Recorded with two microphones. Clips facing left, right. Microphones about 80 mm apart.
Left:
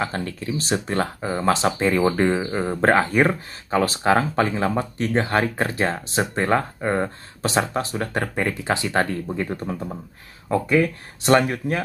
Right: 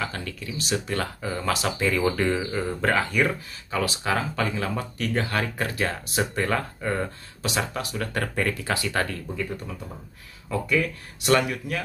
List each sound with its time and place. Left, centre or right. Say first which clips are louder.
0.0 s speech: left 5 dB; left